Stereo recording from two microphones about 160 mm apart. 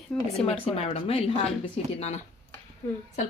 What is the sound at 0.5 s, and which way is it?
Speech, 35° left (ahead or behind).